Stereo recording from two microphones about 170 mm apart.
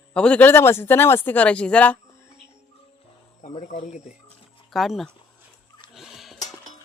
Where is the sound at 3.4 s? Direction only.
45° left (ahead or behind).